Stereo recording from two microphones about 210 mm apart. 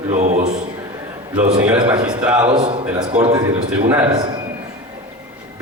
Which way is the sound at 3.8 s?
10° right (ahead or behind).